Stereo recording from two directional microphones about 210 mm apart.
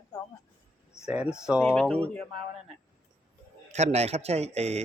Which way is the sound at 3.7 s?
30° right (ahead or behind).